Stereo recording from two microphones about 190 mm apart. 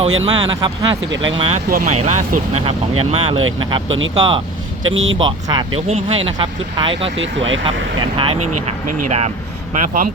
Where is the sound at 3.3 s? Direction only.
90° right.